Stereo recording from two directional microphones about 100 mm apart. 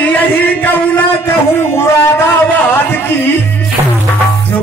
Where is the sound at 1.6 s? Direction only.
25° left (ahead or behind).